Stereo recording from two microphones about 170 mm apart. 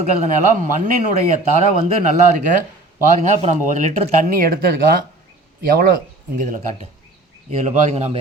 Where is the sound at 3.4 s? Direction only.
40° right (ahead or behind).